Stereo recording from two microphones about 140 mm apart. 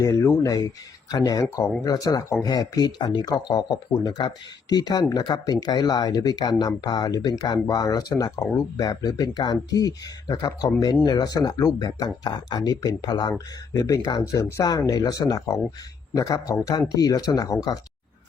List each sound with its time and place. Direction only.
0.0 s speech: 20° left (ahead or behind)